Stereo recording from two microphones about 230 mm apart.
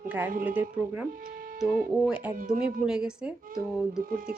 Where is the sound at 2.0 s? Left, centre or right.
Centre.